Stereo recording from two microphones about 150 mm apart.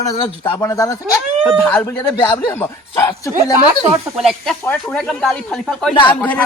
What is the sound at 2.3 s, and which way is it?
Speech, 15° left (ahead or behind).